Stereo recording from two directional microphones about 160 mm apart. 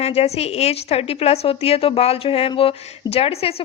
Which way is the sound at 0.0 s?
40° left (ahead or behind).